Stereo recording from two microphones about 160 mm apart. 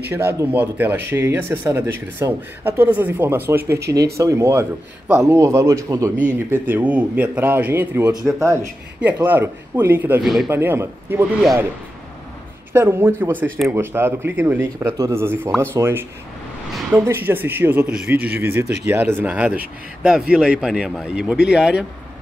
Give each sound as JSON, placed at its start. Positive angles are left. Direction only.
{"t": 0.0, "sound": "a man's voice", "side_deg": -15}
{"t": 10.2, "sound": "speech", "side_deg": 0}
{"t": 10.5, "sound": "speech", "side_deg": -15}
{"t": 12.7, "sound": "speech", "side_deg": -15}